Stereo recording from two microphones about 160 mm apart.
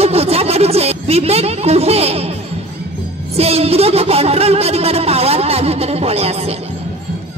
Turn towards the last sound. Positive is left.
turn(degrees=-40)  # may be behind; listen again after turning